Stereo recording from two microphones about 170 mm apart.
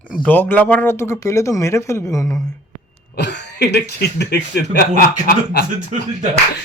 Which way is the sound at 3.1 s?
90° left.